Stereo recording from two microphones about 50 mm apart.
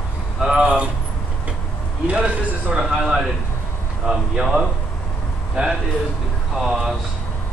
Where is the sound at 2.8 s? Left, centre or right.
Centre.